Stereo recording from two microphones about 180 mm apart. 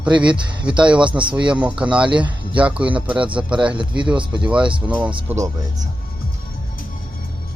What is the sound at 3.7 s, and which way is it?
Speech, 30° right (ahead or behind).